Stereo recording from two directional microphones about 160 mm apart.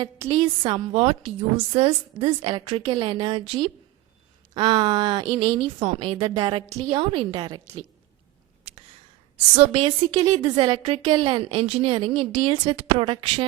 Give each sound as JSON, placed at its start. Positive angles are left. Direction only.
{"t": 0.0, "sound": "a woman's voice", "side_deg": -25}
{"t": 2.5, "sound": "a woman's voice", "side_deg": -30}
{"t": 9.6, "sound": "a woman's voice", "side_deg": -35}
{"t": 10.2, "sound": "a woman's voice", "side_deg": -25}